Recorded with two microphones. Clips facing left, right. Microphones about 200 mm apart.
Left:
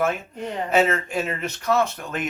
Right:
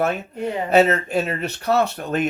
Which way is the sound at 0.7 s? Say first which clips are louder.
Right 4 dB; 40° right (ahead or behind).